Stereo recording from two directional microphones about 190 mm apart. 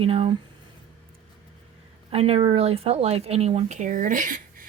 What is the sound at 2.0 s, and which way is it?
Speech, 30° right (ahead or behind).